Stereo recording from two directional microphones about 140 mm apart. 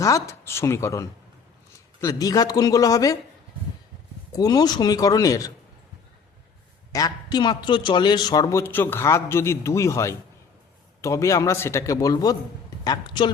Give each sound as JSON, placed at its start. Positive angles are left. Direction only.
{"t": 0.0, "sound": "a man's voice", "side_deg": 20}
{"t": 4.3, "sound": "a man's voice", "side_deg": 25}
{"t": 6.9, "sound": "a man's voice", "side_deg": 30}